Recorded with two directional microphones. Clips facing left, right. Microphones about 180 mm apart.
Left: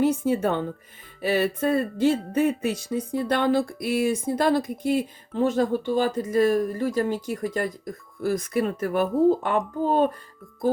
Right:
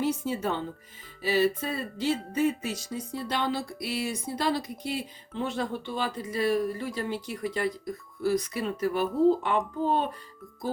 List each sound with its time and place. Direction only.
0.0 s music: 50° left (ahead or behind)